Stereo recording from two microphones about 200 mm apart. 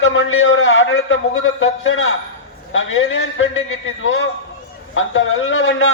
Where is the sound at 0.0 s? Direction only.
80° left.